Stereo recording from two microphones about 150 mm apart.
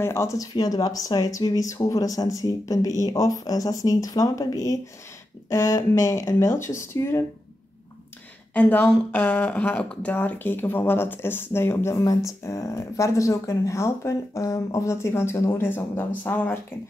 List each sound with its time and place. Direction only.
0.0 s speech: 20° left (ahead or behind)
8.5 s speech: 10° left (ahead or behind)